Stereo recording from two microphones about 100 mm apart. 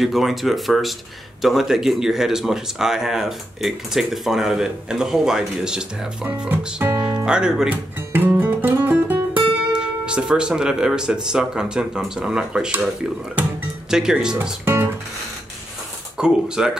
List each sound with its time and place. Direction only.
0.0 s speech: centre (ahead or behind)
6.8 s speech: 25° right (ahead or behind)
7.2 s speech: 10° right (ahead or behind)
7.7 s music: 20° right (ahead or behind)
8.4 s guitar: 20° right (ahead or behind)
9.7 s speech: 10° right (ahead or behind)
13.4 s music: 5° right (ahead or behind)
14.1 s speech: 5° right (ahead or behind)
14.6 s guitar: 20° right (ahead or behind)
16.2 s speech: 5° right (ahead or behind)